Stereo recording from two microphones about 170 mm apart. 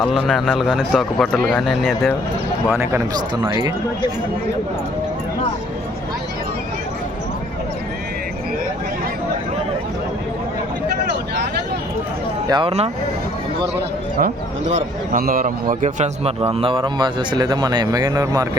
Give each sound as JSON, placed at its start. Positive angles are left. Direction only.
{"t": 0.0, "sound": "a man's voice", "side_deg": 0}
{"t": 2.6, "sound": "speech", "side_deg": -15}
{"t": 12.5, "sound": "a man's voice", "side_deg": -25}
{"t": 14.8, "sound": "a man's voice", "side_deg": -55}
{"t": 15.7, "sound": "a man's voice", "side_deg": -45}